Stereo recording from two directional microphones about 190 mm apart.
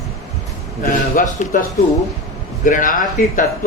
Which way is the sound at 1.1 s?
40° left (ahead or behind).